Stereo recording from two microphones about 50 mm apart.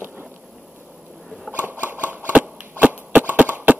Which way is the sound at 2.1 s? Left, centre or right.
Right.